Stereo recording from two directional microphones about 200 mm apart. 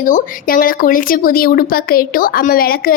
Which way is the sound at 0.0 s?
45° left (ahead or behind).